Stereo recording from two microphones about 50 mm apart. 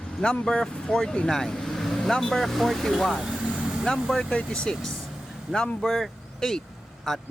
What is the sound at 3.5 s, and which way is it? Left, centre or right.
Vehicle, centre.